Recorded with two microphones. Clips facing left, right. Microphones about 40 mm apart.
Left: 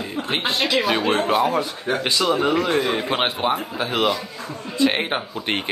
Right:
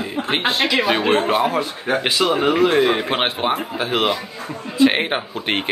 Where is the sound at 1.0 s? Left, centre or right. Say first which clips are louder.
Right 3 dB; right.